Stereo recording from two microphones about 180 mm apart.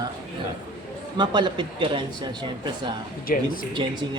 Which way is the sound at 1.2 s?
25° right (ahead or behind).